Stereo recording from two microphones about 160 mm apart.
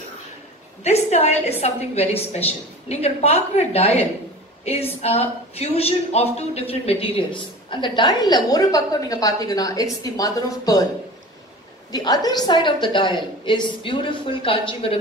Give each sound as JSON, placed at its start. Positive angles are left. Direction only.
{"t": 0.8, "sound": "a woman's voice", "side_deg": 40}
{"t": 11.9, "sound": "a woman's voice", "side_deg": 25}